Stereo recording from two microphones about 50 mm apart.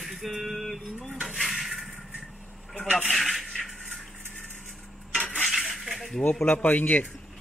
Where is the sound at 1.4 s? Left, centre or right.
Centre.